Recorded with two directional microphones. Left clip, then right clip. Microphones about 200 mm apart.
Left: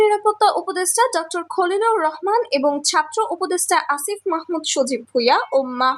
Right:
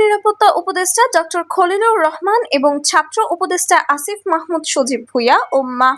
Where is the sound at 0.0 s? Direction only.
15° right (ahead or behind).